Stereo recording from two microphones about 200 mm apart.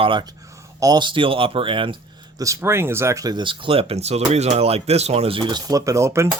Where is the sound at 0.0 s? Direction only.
25° right (ahead or behind).